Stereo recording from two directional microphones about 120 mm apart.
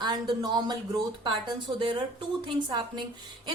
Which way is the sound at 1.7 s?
45° right (ahead or behind).